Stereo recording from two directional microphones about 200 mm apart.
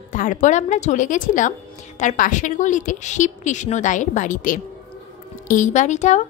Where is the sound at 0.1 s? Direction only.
40° left (ahead or behind).